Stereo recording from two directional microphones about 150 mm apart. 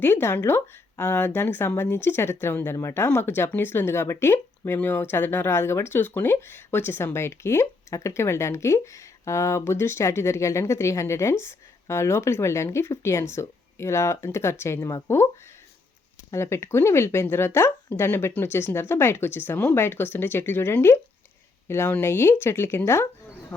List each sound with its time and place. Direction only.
0.0 s speech: 15° left (ahead or behind)
16.3 s speech: 20° left (ahead or behind)